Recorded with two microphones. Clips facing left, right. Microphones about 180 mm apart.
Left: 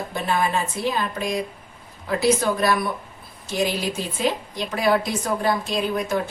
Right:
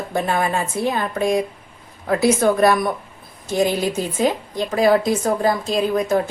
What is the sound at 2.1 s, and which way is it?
Speech, 55° right (ahead or behind).